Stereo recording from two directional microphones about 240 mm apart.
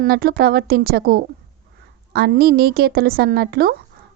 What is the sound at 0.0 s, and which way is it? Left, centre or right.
Speech, right.